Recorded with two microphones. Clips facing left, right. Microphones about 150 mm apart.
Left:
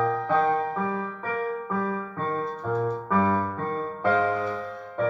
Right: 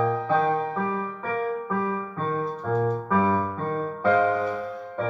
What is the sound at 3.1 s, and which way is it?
Music, 15° right (ahead or behind).